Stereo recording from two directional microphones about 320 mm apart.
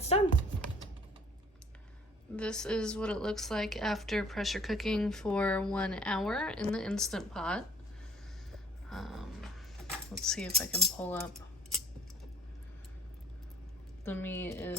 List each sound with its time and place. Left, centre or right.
0.0 s typing: centre
2.3 s a woman's voice: centre
8.5 s a sound: centre
10.2 s a woman's voice: centre
14.0 s speech: centre